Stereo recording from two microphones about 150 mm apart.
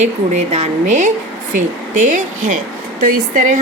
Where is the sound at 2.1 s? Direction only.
55° right (ahead or behind).